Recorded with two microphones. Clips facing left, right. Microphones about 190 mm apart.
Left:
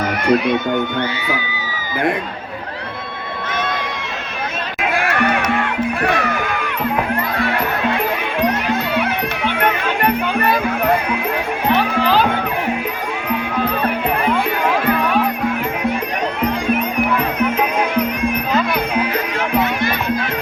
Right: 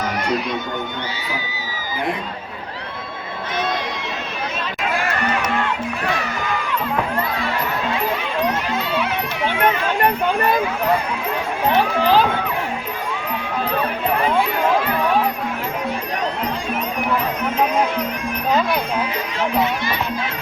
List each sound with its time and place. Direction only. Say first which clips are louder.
0.3 s speech: left 7 dB; 60° left (ahead or behind)
4.8 s music: left 5 dB; 65° left (ahead or behind)
11.7 s music: left 1 dB; 65° left (ahead or behind)
18.7 s music: left 3 dB; 60° left (ahead or behind)